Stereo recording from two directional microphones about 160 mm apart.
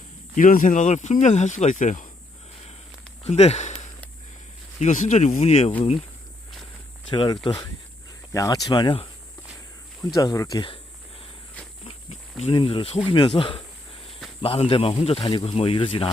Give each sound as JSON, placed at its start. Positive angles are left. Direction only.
{"t": 0.3, "sound": "speech", "side_deg": 55}
{"t": 3.2, "sound": "speech", "side_deg": 40}
{"t": 7.1, "sound": "speech", "side_deg": 30}
{"t": 10.2, "sound": "speech", "side_deg": 20}
{"t": 12.4, "sound": "speech", "side_deg": 35}